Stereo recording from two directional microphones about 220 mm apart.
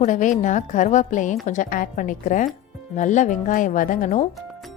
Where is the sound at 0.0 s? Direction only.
35° left (ahead or behind).